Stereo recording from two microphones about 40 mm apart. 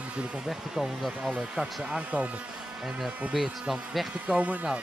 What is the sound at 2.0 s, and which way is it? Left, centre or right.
Speech, right.